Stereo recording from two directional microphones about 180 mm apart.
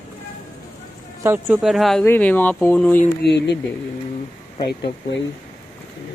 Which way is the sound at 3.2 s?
70° left (ahead or behind).